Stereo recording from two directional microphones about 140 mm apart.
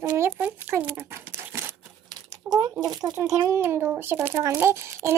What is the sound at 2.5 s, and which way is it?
A child's voice, 25° right (ahead or behind).